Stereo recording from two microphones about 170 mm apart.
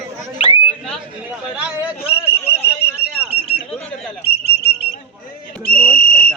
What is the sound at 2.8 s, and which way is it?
Whistle, 70° left (ahead or behind).